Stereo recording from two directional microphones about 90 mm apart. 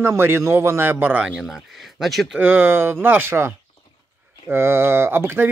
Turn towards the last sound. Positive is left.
turn(degrees=-25)  # may be behind; listen again after turning